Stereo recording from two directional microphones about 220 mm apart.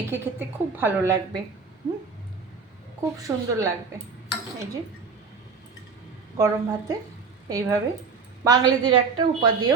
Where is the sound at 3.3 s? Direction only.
10° right (ahead or behind).